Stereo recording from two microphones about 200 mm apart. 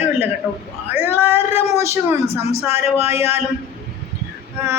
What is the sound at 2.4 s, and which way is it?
Speech, 30° left (ahead or behind).